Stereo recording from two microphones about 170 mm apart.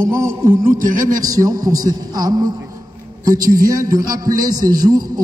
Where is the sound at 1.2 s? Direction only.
20° right (ahead or behind).